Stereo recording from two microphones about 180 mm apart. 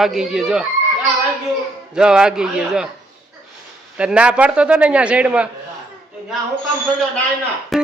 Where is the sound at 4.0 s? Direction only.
5° right (ahead or behind).